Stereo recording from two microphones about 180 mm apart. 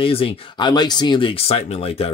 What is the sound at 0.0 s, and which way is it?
Speech, 30° left (ahead or behind).